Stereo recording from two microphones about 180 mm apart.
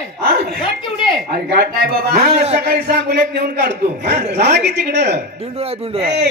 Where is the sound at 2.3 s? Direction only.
35° right (ahead or behind).